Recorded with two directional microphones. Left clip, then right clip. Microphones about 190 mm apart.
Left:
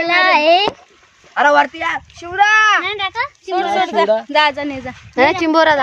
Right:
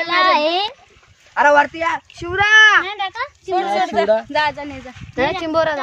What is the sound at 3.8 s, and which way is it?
Speech, 35° left (ahead or behind).